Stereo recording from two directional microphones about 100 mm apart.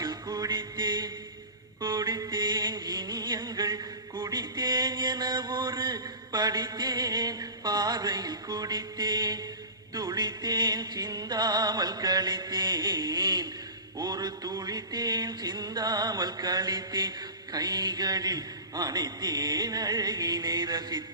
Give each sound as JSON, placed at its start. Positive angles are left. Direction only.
{"t": 0.0, "sound": "music", "side_deg": -45}
{"t": 17.5, "sound": "a man's voice", "side_deg": -40}